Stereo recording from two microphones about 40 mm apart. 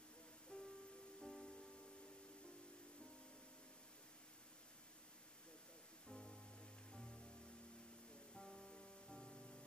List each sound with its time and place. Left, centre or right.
0.5 s music: left
1.2 s music: centre
6.0 s music: centre
8.4 s music: centre